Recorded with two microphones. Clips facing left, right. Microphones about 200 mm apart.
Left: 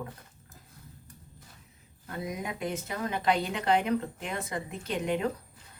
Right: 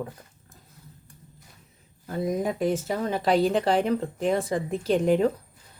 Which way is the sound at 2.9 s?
35° right (ahead or behind).